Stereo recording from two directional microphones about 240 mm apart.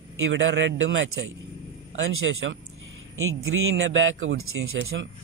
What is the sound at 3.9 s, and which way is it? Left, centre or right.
A man's voice, right.